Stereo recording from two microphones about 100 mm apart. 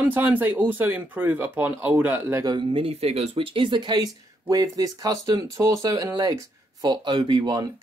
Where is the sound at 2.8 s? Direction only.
85° right; by 7.6 s 50° right (ahead or behind).